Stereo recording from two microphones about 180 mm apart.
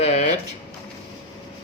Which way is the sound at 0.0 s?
35° left (ahead or behind).